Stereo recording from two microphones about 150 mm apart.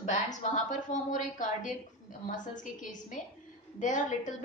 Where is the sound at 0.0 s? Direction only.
50° left (ahead or behind).